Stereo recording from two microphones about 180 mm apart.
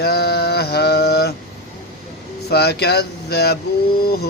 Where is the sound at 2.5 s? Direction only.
65° left (ahead or behind).